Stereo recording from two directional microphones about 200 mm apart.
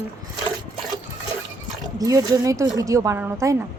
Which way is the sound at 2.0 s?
20° right (ahead or behind).